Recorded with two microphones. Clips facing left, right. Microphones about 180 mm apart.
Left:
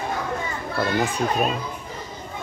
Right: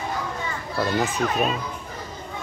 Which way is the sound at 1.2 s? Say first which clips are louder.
Left 1 dB; 30° left (ahead or behind).